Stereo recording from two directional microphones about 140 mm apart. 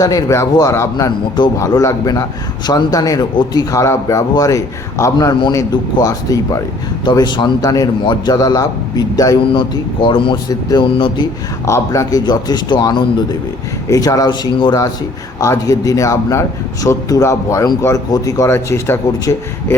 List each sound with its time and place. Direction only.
0.0 s a man's voice: 25° left (ahead or behind)
10.5 s a man's voice: 25° left (ahead or behind)
10.8 s speech: 40° left (ahead or behind)
11.6 s a man's voice: 20° left (ahead or behind)